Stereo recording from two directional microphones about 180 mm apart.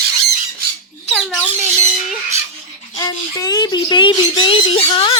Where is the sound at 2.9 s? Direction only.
20° left (ahead or behind).